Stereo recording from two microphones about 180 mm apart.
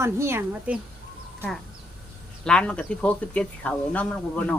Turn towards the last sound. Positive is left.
turn(degrees=10)  # may be behind; listen again after turning